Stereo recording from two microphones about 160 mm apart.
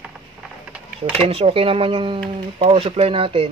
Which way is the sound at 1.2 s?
35° right (ahead or behind).